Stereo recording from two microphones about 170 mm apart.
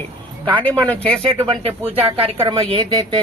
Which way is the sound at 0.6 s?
10° left (ahead or behind).